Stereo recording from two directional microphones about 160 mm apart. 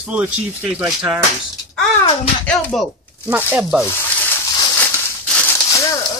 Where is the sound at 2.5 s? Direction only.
5° left (ahead or behind).